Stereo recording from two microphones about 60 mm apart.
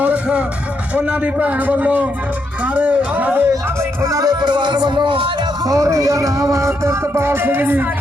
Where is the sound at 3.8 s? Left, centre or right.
Right.